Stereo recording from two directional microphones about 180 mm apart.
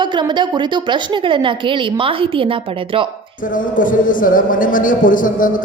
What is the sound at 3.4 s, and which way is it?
A man's voice, 50° left (ahead or behind).